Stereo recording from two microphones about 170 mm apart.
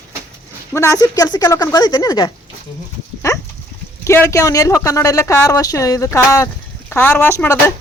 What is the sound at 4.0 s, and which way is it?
Speech, 15° left (ahead or behind).